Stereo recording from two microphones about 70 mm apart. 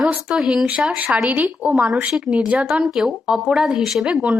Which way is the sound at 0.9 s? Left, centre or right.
Right.